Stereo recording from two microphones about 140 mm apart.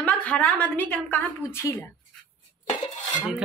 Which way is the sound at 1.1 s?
20° left (ahead or behind).